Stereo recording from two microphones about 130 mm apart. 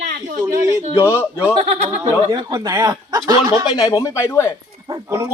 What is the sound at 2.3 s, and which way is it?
A man's voice, 30° right (ahead or behind).